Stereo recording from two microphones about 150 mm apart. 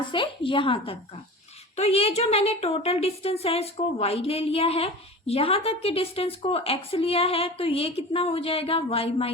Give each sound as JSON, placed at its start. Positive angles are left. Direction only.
{"t": 0.1, "sound": "a woman's voice", "side_deg": 35}